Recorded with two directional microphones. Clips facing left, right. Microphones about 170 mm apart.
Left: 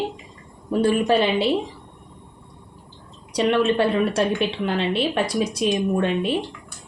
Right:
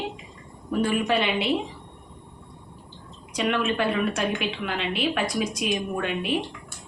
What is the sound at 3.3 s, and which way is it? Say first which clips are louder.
A woman's voice: left 6 dB; 35° left (ahead or behind).